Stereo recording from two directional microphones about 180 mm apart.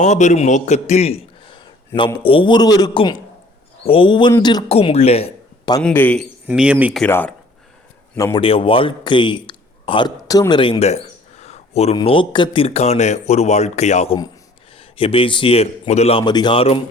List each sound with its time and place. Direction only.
0.0 s a man's voice: 40° left (ahead or behind); by 4.6 s 20° left (ahead or behind)
4.7 s speech: 35° left (ahead or behind)
5.8 s speech: 10° left (ahead or behind)
6.5 s speech: 10° right (ahead or behind)
7.0 s a man's voice: 10° left (ahead or behind)
8.4 s a man's voice: 30° left (ahead or behind)